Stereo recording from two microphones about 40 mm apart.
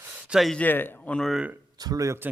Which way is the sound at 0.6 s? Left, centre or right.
Left.